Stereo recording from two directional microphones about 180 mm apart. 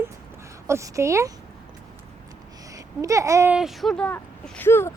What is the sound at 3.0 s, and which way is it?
Speech, 15° right (ahead or behind).